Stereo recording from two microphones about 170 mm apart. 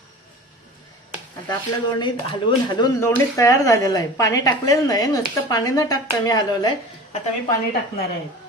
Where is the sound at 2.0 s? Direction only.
25° left (ahead or behind).